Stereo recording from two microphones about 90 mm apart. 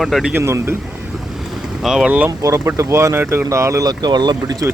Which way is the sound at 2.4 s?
35° right (ahead or behind).